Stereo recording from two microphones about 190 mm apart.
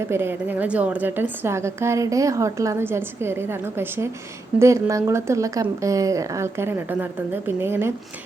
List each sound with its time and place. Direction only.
0.0 s a woman's voice: 10° right (ahead or behind)